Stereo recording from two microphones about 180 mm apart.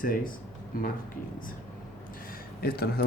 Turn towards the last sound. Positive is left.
turn(degrees=60)  # may be behind; listen again after turning